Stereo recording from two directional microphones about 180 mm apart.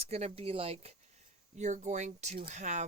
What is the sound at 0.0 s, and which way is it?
Speech, 35° right (ahead or behind).